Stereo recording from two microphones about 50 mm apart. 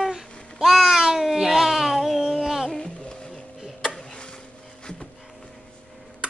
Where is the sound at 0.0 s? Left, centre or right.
Centre.